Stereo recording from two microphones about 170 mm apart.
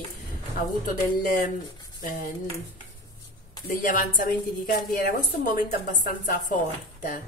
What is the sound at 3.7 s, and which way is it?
Speech, 50° left (ahead or behind).